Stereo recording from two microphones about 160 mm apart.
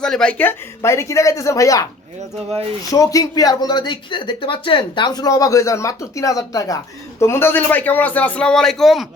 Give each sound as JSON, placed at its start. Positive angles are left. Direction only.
{"t": 0.0, "sound": "a man's voice", "side_deg": 5}